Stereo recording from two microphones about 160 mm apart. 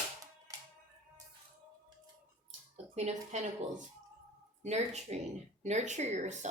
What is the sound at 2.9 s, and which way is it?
Speech, 45° right (ahead or behind).